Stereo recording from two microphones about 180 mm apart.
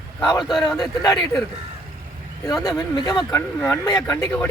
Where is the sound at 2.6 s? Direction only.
20° left (ahead or behind).